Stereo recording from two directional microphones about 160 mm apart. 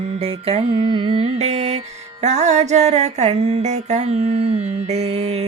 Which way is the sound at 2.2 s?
45° right (ahead or behind).